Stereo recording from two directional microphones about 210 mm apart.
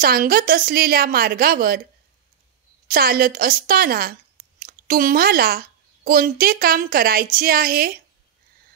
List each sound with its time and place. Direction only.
0.0 s a woman's voice: 45° right (ahead or behind)
2.9 s a woman's voice: 45° right (ahead or behind)